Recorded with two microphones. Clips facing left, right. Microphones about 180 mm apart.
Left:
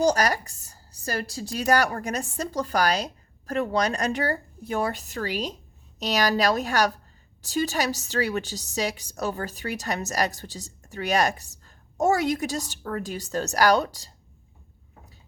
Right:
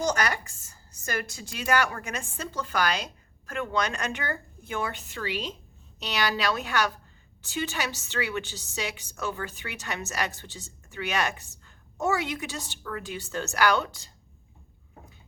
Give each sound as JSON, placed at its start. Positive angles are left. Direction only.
{"t": 0.0, "sound": "a woman's voice", "side_deg": 35}